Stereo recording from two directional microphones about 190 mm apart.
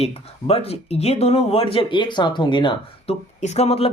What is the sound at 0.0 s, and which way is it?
A man's voice, 30° left (ahead or behind).